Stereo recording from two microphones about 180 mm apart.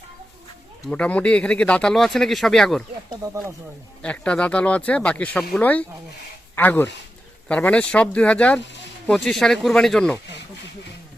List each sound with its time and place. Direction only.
0.9 s speech: 5° left (ahead or behind)
3.1 s speech: 20° right (ahead or behind)
4.0 s speech: 5° left (ahead or behind)